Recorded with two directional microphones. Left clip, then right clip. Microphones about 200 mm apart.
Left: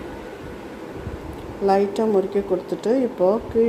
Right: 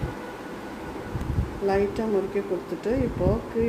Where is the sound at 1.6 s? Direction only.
35° left (ahead or behind).